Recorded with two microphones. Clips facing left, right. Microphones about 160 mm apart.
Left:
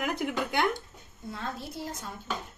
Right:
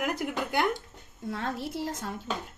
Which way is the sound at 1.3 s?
85° right.